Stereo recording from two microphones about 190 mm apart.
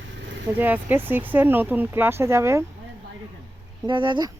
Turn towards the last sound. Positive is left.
turn(degrees=-25)  # may be behind; listen again after turning